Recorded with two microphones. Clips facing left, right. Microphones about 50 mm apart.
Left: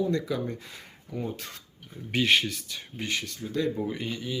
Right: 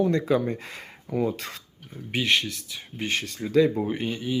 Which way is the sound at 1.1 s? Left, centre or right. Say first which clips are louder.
Right 8 dB; right.